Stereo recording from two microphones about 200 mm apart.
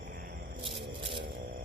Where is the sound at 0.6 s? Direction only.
25° right (ahead or behind).